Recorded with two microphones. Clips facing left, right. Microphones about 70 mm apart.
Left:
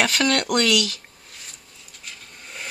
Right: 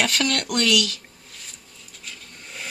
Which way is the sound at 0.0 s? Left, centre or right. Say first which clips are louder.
Left 3 dB; left.